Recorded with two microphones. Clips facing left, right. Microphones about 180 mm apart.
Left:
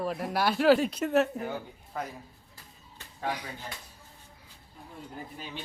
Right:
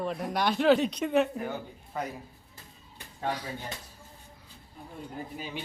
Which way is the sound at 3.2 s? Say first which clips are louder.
Right 1 dB; 10° left (ahead or behind).